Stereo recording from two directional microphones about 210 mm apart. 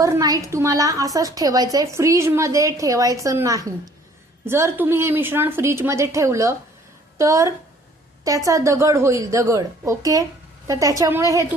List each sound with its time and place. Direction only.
0.0 s a woman's voice: 15° right (ahead or behind)